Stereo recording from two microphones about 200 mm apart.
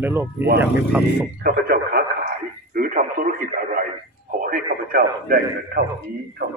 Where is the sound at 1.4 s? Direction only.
50° right (ahead or behind).